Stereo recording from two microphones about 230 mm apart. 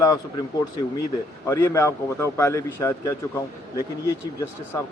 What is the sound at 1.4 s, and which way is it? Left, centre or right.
A man's voice, centre.